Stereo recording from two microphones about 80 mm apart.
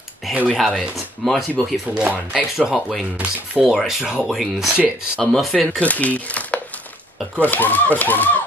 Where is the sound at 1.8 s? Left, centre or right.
Centre.